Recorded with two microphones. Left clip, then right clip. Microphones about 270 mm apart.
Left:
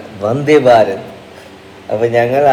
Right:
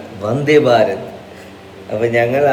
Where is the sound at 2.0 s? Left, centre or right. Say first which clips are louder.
Left 2 dB; left.